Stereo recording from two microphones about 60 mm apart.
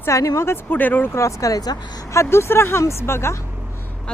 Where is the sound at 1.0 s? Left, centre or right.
Left.